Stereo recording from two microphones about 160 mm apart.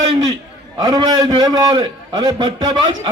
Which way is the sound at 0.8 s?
25° right (ahead or behind).